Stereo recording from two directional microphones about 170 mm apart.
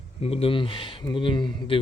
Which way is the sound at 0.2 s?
35° left (ahead or behind).